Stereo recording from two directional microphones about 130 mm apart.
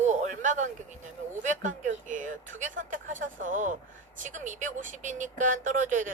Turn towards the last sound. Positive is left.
turn(degrees=-80)